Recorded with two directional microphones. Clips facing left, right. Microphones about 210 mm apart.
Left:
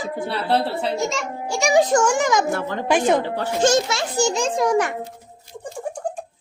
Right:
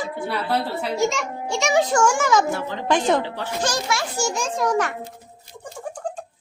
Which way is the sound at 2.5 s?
50° left (ahead or behind).